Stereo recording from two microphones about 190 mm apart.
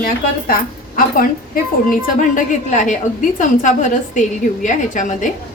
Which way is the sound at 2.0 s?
40° left (ahead or behind).